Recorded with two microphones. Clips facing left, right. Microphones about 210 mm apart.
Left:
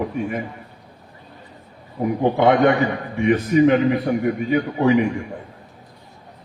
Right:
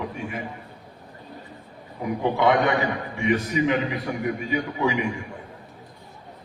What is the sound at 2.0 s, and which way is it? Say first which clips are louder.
A man's voice: left 5 dB; 45° left (ahead or behind).